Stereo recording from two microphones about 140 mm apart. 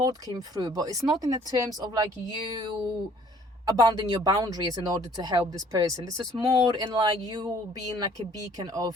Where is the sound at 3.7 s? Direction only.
30° right (ahead or behind).